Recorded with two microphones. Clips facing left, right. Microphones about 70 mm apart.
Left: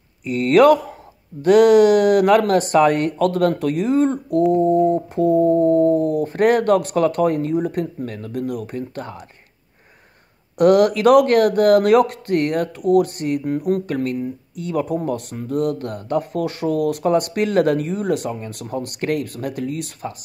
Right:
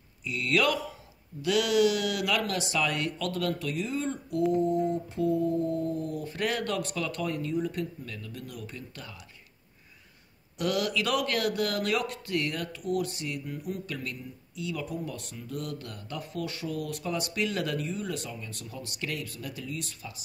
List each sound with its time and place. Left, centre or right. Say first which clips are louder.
0.2 s speech: left 14 dB; left
10.6 s speech: left 15 dB; left